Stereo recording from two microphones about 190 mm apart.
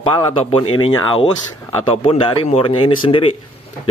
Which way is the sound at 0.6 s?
90° left.